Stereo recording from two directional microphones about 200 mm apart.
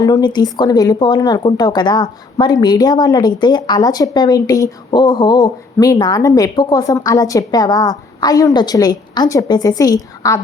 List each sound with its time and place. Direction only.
0.0 s speech: 20° left (ahead or behind)